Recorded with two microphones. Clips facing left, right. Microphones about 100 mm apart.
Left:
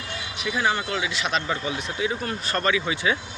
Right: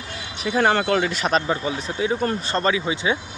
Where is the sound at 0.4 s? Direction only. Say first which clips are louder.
Right 5 dB; 40° right (ahead or behind).